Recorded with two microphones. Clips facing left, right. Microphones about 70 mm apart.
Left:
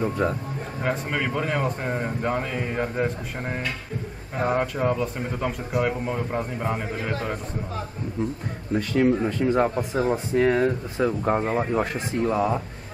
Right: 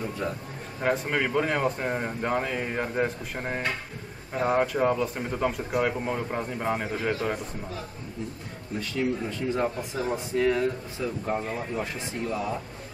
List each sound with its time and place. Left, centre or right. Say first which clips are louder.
0.7 s speech: right 1 dB; centre
4.5 s speech: even; centre
8.7 s speech: left 7 dB; left